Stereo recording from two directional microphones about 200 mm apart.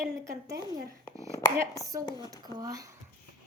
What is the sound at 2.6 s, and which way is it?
Speech, 15° right (ahead or behind).